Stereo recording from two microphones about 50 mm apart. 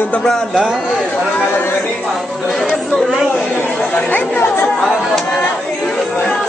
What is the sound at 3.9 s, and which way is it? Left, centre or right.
Speech, left.